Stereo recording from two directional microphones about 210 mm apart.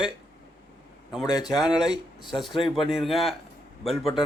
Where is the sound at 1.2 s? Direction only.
20° left (ahead or behind).